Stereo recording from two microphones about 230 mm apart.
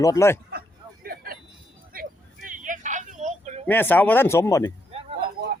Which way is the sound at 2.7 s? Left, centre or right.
Right.